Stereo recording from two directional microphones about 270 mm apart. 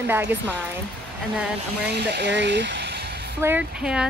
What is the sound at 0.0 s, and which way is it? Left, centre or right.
Speech, centre.